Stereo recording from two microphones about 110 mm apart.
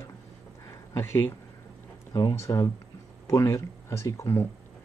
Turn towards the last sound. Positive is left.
turn(degrees=25)  # may be behind; listen again after turning